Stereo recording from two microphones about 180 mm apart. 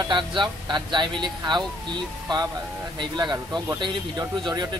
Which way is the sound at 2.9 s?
25° right (ahead or behind).